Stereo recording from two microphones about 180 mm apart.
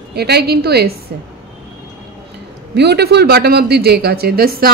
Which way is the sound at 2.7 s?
65° right (ahead or behind).